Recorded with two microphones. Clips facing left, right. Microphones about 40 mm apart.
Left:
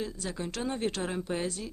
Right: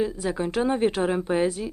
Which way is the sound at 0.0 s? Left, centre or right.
Centre.